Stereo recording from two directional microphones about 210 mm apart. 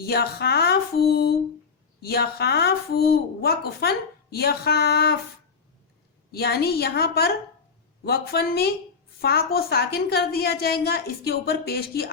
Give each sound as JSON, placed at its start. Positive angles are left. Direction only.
{"t": 0.0, "sound": "a woman's voice", "side_deg": 50}
{"t": 6.3, "sound": "a woman's voice", "side_deg": 50}